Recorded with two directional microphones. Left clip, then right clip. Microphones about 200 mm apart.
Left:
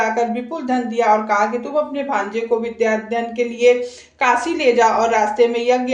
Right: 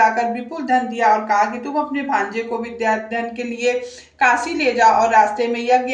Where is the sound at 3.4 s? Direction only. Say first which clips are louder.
Left 8 dB; 25° left (ahead or behind).